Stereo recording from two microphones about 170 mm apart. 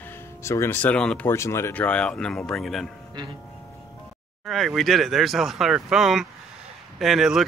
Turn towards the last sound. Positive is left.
turn(degrees=0)  # may be behind; listen again after turning